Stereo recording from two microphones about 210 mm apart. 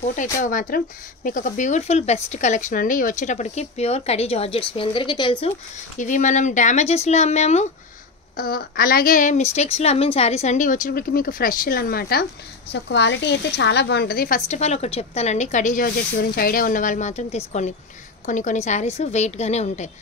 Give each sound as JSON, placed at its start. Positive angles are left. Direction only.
{"t": 0.0, "sound": "speech", "side_deg": 40}
{"t": 5.9, "sound": "speech", "side_deg": 35}
{"t": 8.4, "sound": "speech", "side_deg": 45}